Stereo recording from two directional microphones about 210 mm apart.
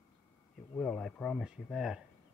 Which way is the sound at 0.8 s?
5° left (ahead or behind).